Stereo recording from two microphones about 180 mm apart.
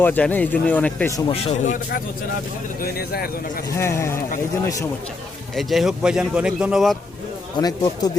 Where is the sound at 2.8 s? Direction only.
60° left (ahead or behind).